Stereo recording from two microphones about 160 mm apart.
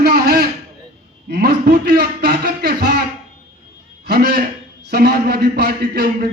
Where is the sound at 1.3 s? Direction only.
85° right.